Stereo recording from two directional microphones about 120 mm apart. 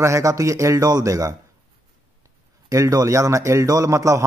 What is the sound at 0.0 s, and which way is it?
A man's voice, 25° right (ahead or behind).